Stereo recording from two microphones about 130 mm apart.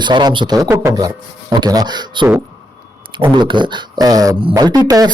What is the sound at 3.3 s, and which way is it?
A man's voice, 35° right (ahead or behind).